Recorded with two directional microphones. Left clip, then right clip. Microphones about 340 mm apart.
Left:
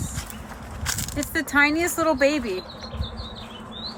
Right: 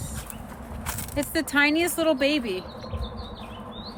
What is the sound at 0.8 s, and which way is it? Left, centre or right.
Speech, centre.